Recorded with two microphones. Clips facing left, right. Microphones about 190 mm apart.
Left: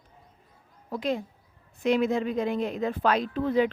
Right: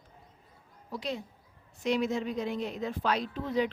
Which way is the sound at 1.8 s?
55° left (ahead or behind).